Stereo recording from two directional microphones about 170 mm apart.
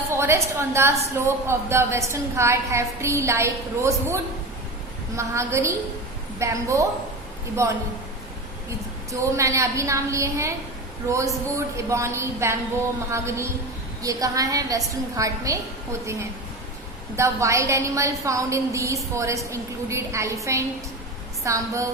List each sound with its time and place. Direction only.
0.1 s a woman's voice: 15° right (ahead or behind)
9.1 s a woman's voice: 15° right (ahead or behind)
11.8 s a woman's voice: 15° right (ahead or behind)
17.2 s a woman's voice: 15° right (ahead or behind)